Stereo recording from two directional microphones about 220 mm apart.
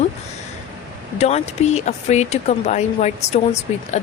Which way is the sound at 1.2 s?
30° left (ahead or behind).